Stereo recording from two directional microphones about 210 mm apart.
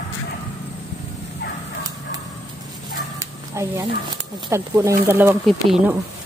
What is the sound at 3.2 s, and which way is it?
Dog, 15° right (ahead or behind).